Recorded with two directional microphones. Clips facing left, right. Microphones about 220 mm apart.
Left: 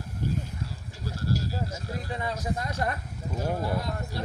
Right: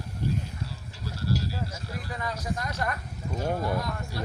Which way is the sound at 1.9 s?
25° left (ahead or behind).